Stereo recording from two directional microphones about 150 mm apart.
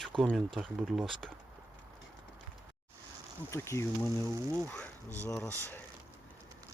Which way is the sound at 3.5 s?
20° left (ahead or behind).